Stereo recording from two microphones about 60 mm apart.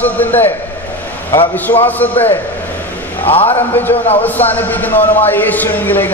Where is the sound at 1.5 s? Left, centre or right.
Left.